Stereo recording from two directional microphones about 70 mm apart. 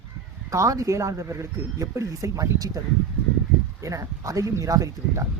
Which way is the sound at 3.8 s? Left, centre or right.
Right.